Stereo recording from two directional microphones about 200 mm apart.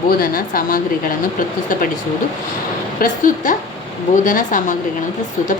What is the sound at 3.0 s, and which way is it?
A woman's voice, 40° left (ahead or behind).